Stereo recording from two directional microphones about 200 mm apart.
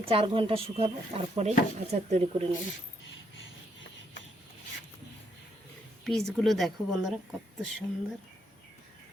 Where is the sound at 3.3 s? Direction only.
70° left (ahead or behind).